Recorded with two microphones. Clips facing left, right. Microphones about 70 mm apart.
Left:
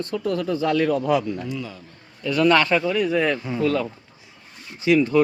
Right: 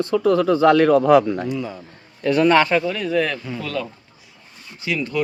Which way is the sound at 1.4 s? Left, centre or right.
Right.